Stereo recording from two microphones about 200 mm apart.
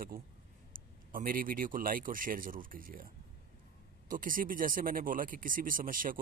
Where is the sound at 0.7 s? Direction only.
45° right (ahead or behind).